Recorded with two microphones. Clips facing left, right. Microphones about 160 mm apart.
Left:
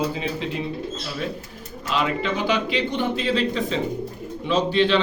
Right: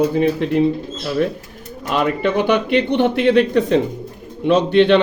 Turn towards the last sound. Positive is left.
turn(degrees=-60)  # may be behind; listen again after turning